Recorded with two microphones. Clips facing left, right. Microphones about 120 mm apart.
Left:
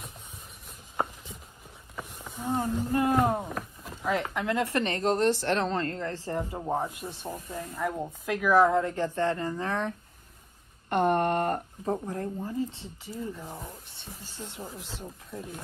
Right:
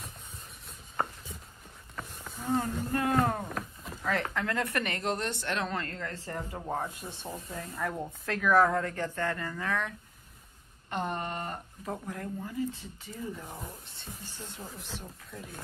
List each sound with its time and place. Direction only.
1.0 s a sound: 15° left (ahead or behind)
2.0 s a woman's voice: 10° left (ahead or behind)
6.4 s speech: 15° left (ahead or behind); by 9.9 s 30° left (ahead or behind)
10.9 s a sound: 55° left (ahead or behind)
11.8 s a woman's voice: 30° left (ahead or behind)
13.4 s speech: 10° left (ahead or behind)